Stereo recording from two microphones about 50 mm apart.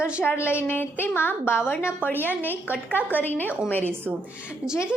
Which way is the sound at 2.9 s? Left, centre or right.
Left.